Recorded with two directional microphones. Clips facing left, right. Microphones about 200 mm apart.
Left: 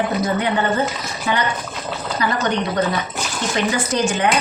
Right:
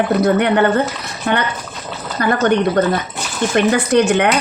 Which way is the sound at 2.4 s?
55° right (ahead or behind).